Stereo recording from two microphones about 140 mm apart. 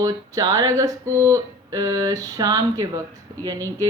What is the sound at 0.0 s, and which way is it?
Speech, 30° right (ahead or behind).